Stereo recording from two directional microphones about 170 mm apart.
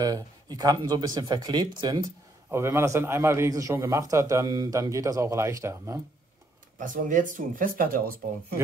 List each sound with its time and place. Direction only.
0.0 s a man's voice: 20° right (ahead or behind)
6.8 s speech: 50° right (ahead or behind)